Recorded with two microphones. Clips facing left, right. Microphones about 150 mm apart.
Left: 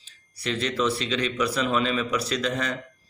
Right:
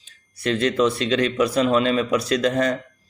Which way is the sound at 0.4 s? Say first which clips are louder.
Right 6 dB; 50° right (ahead or behind).